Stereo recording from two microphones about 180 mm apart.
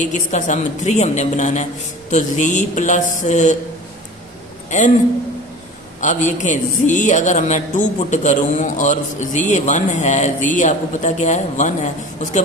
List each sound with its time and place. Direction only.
0.1 s a woman's voice: 45° left (ahead or behind)
4.7 s a man's voice: 40° left (ahead or behind)
6.0 s a man's voice: 45° left (ahead or behind)